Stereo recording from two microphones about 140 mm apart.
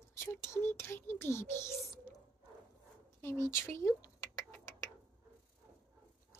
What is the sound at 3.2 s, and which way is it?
Speech, 20° left (ahead or behind).